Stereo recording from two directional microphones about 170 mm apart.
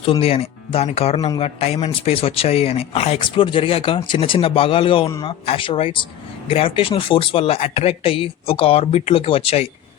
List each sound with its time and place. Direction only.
0.0 s speech: 35° left (ahead or behind)